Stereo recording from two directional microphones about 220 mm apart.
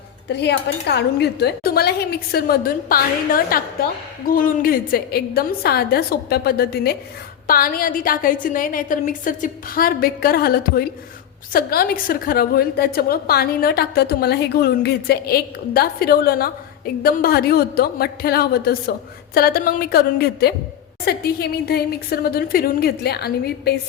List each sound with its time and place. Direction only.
0.3 s a woman's voice: 50° left (ahead or behind)